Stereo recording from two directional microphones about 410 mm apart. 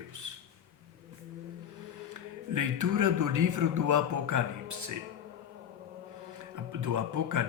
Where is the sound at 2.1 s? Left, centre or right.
Right.